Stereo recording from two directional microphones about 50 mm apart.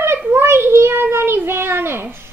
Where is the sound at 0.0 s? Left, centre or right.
Right.